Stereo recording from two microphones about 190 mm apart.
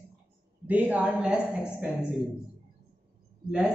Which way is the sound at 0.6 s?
10° right (ahead or behind).